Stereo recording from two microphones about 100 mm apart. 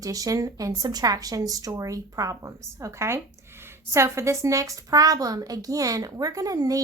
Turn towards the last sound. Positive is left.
turn(degrees=-35)  # may be behind; listen again after turning